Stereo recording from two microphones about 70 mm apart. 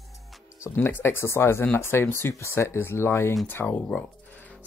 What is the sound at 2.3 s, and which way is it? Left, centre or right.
Speech, left.